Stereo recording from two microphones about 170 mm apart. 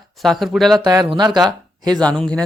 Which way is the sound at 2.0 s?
5° left (ahead or behind).